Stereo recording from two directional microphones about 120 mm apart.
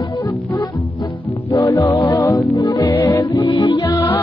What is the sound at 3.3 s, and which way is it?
Music, 45° left (ahead or behind).